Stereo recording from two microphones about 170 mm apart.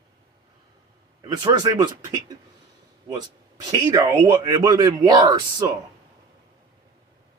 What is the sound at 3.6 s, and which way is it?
Speech, 25° right (ahead or behind).